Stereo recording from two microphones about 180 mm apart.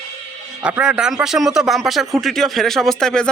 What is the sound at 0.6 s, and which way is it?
Speech, 5° right (ahead or behind).